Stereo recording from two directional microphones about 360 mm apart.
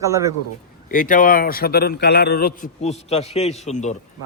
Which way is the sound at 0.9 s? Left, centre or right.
Left.